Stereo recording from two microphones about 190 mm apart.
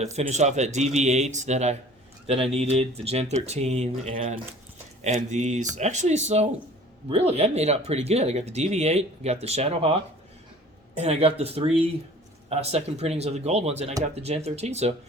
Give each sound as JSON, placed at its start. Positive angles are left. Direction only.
{"t": 0.0, "sound": "speech", "side_deg": -35}